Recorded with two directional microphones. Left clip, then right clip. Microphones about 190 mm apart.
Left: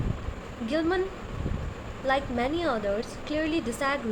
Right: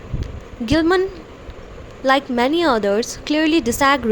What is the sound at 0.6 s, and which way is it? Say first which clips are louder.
Speech: right 11 dB; 55° right (ahead or behind).